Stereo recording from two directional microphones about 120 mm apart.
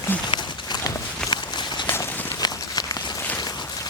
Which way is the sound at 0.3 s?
40° left (ahead or behind).